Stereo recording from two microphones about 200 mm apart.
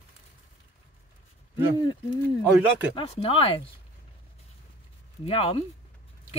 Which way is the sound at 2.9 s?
30° left (ahead or behind).